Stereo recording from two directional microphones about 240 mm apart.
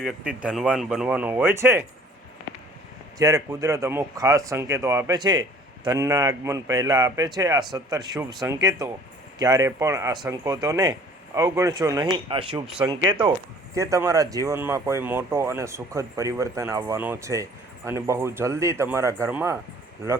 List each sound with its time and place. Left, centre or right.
0.4 s speech: centre
3.2 s speech: centre
12.6 s speech: centre
12.9 s speech: centre